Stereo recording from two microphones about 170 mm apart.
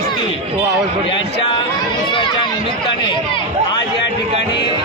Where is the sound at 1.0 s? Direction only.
30° left (ahead or behind).